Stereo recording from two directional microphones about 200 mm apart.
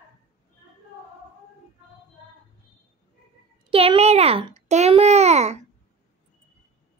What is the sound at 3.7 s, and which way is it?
Babbling, 30° right (ahead or behind).